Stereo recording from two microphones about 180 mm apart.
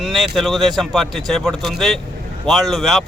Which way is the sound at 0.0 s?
Centre (ahead or behind).